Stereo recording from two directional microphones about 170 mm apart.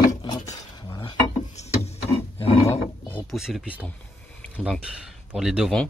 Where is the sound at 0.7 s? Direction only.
25° left (ahead or behind).